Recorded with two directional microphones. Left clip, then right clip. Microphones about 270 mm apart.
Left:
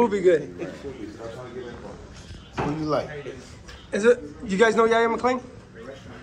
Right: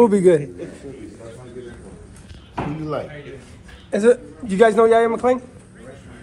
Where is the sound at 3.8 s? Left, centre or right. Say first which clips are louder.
Right 4 dB; centre.